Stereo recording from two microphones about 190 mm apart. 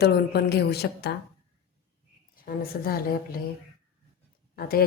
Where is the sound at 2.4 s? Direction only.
50° left (ahead or behind).